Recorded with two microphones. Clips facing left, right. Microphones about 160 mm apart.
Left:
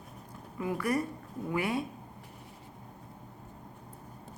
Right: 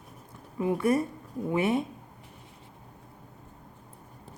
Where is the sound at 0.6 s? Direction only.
25° right (ahead or behind).